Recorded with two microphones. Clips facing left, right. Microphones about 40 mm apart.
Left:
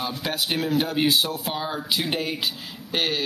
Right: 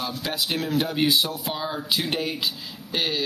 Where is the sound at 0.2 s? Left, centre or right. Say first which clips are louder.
Left 2 dB; centre.